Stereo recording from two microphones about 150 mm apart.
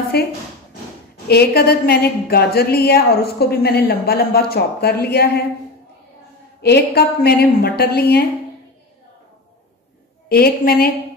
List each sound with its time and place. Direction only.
0.1 s a woman's voice: 90° left
6.6 s a woman's voice: 90° left
10.2 s a woman's voice: 85° left